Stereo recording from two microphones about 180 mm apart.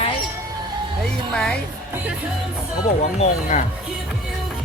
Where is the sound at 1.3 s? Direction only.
5° left (ahead or behind).